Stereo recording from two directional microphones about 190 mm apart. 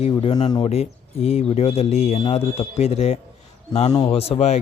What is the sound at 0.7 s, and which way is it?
Speech, 30° left (ahead or behind).